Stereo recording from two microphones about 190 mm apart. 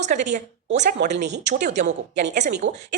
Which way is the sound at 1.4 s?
40° right (ahead or behind).